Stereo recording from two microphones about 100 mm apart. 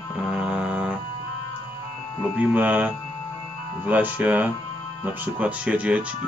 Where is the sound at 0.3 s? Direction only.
10° right (ahead or behind).